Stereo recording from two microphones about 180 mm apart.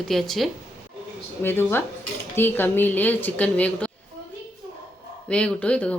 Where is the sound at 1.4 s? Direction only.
10° left (ahead or behind).